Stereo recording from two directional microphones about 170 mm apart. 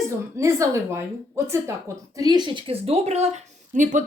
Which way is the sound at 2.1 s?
25° right (ahead or behind).